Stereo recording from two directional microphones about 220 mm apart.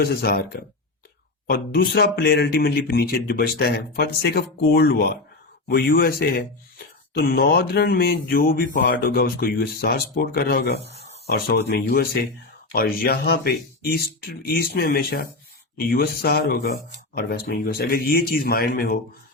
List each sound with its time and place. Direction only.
0.0 s speech: 45° left (ahead or behind)